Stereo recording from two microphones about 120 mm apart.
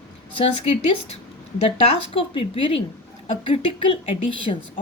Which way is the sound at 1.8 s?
55° left (ahead or behind).